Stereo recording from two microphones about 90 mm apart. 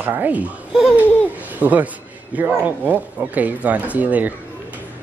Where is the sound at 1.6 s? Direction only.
15° right (ahead or behind).